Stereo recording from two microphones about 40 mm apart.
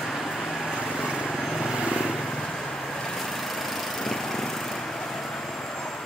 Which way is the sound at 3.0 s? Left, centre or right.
Centre.